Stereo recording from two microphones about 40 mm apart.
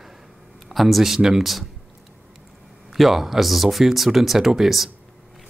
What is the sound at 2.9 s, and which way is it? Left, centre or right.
Speech, centre.